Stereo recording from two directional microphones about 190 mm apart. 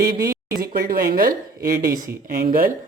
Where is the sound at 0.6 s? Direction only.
50° right (ahead or behind).